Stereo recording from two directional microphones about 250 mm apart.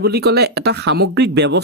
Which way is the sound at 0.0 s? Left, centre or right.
Right.